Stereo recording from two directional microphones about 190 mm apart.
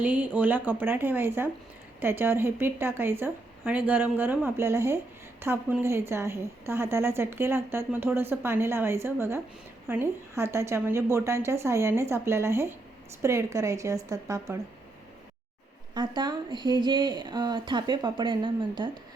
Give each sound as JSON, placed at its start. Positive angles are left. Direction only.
{"t": 0.0, "sound": "a woman's voice", "side_deg": -10}
{"t": 16.0, "sound": "speech", "side_deg": -25}